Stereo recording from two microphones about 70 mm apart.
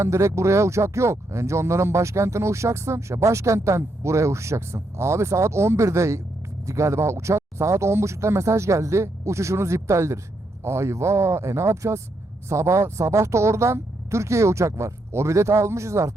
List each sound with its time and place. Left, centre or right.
0.0 s speech: right